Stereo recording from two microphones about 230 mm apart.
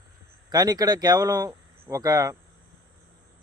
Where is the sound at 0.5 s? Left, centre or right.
Centre.